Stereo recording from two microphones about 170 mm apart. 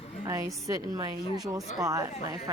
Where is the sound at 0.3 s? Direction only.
20° right (ahead or behind).